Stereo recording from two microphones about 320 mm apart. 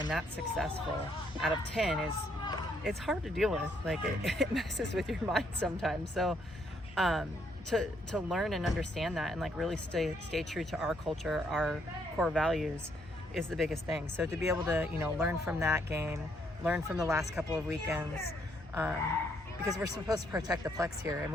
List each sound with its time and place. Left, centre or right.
0.1 s speech: centre